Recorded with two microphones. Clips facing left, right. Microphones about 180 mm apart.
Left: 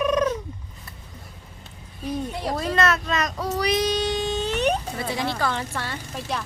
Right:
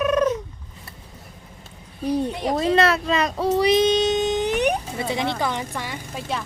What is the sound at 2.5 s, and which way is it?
Speech, 30° right (ahead or behind).